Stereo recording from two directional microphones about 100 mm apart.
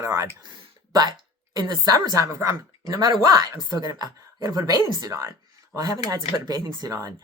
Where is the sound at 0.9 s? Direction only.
45° right (ahead or behind).